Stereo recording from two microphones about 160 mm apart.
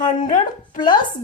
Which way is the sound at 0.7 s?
30° left (ahead or behind).